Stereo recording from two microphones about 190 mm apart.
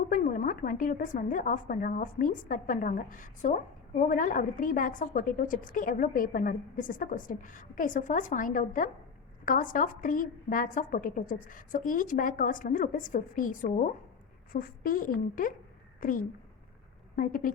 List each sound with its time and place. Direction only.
0.1 s a woman's voice: 45° left (ahead or behind)